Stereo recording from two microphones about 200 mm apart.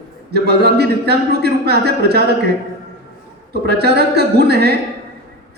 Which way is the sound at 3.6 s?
55° right (ahead or behind).